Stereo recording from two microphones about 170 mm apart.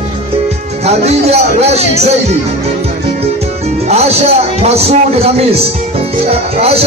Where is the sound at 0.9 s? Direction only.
40° right (ahead or behind).